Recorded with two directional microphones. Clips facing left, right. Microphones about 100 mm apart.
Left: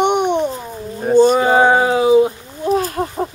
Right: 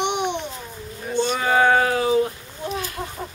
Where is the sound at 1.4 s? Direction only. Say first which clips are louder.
Left 5 dB; 25° left (ahead or behind).